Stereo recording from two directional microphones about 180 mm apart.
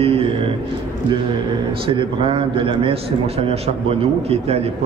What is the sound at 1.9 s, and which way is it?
A man's voice, 30° right (ahead or behind).